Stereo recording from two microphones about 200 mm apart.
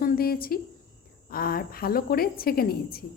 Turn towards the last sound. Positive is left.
turn(degrees=50)  # may be behind; listen again after turning